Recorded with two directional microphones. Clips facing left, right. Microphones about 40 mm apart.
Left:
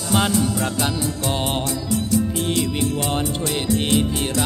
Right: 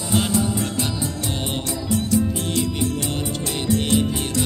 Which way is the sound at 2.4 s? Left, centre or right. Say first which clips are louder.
Left 1 dB; left.